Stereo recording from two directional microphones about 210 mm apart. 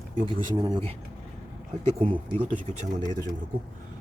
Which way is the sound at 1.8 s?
30° right (ahead or behind).